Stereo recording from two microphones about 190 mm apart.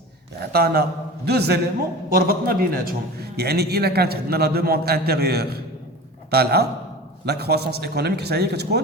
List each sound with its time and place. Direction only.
0.3 s a man's voice: 55° right (ahead or behind)